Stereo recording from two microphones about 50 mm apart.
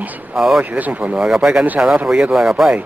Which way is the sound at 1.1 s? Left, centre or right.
Centre.